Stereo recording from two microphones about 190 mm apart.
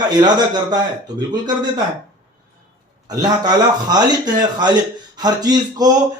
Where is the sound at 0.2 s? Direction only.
20° right (ahead or behind).